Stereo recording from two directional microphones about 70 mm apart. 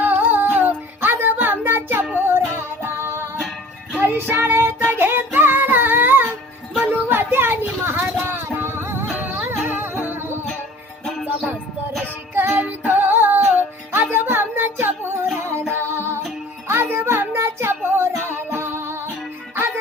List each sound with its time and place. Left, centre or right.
0.0 s music: right
6.9 s a sound: right
8.3 s music: right
12.3 s music: right
12.5 s music: right
16.6 s child singing: right